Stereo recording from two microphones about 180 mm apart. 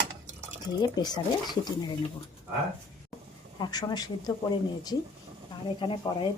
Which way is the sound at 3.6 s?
20° left (ahead or behind).